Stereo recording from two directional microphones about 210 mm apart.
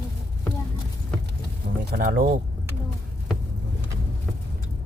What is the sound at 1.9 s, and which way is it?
Speech, 45° right (ahead or behind).